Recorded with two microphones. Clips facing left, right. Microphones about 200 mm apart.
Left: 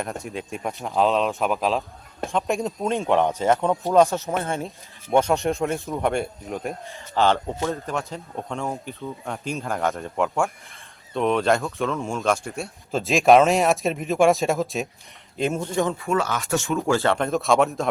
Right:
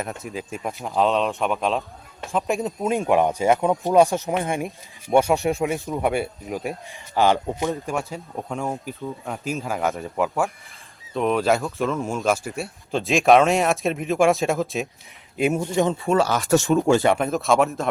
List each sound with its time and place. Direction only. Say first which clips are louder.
0.0 s speech: even; centre (ahead or behind)
15.4 s speech: right 3 dB; 10° right (ahead or behind)
16.0 s speech: right 4 dB; 30° right (ahead or behind)
16.8 s speech: right 3 dB; 15° right (ahead or behind); by 17.8 s centre (ahead or behind)